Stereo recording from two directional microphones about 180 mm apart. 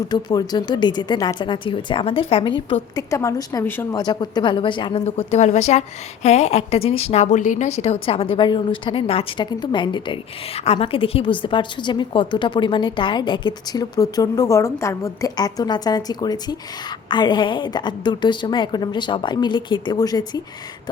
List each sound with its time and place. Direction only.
0.1 s a woman's voice: 20° left (ahead or behind)
3.1 s a woman's voice: 15° left (ahead or behind)
4.0 s a woman's voice: 25° left (ahead or behind)